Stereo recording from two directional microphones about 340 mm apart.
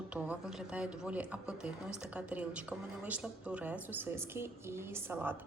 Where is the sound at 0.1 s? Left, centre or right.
Centre.